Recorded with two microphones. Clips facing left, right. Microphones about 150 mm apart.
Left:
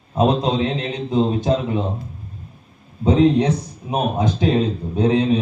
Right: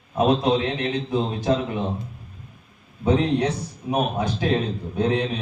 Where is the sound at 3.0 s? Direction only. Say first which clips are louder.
Left 5 dB; 20° left (ahead or behind).